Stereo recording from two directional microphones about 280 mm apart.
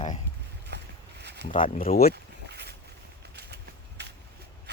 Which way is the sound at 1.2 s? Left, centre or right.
Right.